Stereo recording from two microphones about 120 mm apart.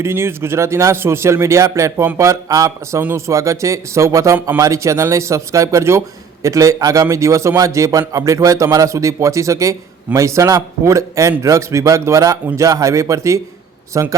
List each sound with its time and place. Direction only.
0.0 s a man's voice: 20° right (ahead or behind)